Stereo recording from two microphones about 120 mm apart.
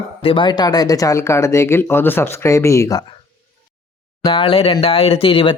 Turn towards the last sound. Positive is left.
turn(degrees=50)  # may be behind; listen again after turning